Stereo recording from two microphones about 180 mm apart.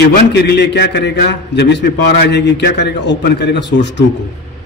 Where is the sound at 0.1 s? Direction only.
65° left (ahead or behind).